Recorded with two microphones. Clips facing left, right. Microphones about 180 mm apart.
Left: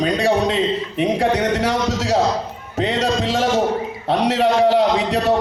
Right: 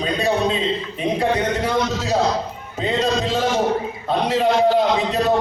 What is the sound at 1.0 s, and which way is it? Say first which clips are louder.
A man's voice: left 3 dB; 80° left.